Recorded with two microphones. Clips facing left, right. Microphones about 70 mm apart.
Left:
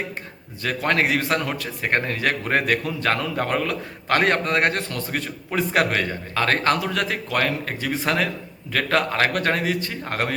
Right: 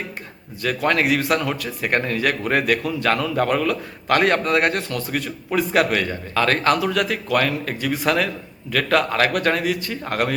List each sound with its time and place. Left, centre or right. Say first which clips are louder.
0.6 s a man's voice: right 2 dB; left